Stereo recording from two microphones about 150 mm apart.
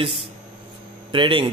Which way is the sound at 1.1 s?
35° right (ahead or behind).